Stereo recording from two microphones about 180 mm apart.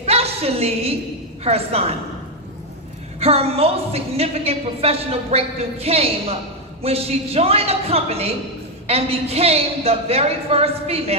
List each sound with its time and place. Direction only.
0.0 s a sound: 35° right (ahead or behind)
1.5 s a woman's voice: 35° right (ahead or behind)
3.2 s a woman's voice: 35° right (ahead or behind)